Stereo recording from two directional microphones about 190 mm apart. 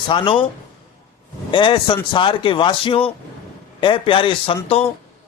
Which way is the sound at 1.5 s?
25° left (ahead or behind).